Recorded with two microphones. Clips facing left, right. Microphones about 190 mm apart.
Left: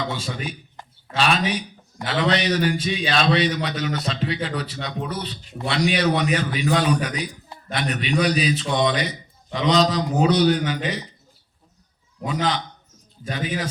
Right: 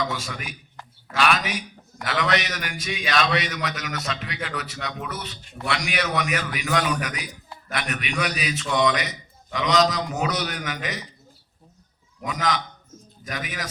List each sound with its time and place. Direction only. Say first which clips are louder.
0.0 s a man's voice: left 1 dB; 30° left (ahead or behind)
12.2 s a man's voice: left 2 dB; 30° left (ahead or behind)